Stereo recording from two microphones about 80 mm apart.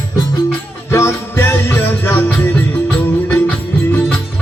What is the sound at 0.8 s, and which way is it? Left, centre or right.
Music, left.